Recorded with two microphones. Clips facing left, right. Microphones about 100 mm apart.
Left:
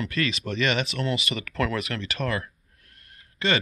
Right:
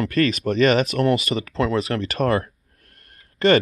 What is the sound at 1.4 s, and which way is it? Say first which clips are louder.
Speech: right 5 dB; 30° right (ahead or behind).